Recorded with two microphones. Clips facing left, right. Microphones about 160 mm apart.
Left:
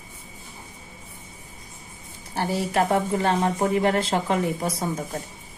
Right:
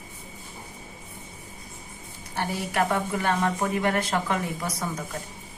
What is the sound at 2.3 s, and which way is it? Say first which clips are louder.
Speech: left 3 dB; 30° left (ahead or behind).